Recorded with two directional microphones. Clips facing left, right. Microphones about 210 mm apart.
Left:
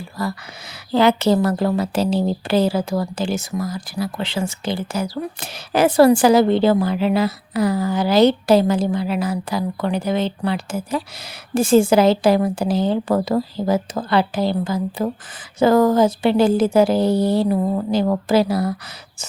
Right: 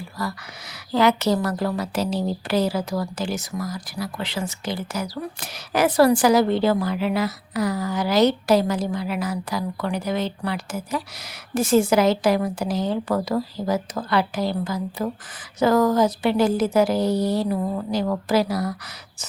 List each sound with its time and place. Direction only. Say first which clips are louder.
0.2 s a woman's voice: left 5 dB; 25° left (ahead or behind)